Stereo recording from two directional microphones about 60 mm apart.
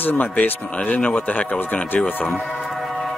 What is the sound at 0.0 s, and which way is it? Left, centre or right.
Speech, left.